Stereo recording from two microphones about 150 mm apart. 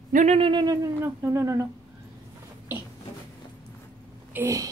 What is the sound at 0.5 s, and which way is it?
Speech, 25° right (ahead or behind).